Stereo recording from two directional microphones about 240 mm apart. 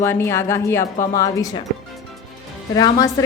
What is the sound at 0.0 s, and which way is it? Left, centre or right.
A woman's voice, centre.